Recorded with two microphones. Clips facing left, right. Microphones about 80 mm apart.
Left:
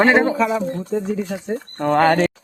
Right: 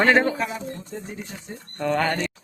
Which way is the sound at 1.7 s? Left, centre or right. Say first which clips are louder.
Left 7 dB; left.